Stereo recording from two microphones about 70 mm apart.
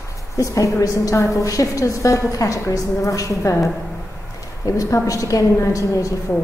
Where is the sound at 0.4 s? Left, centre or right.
Left.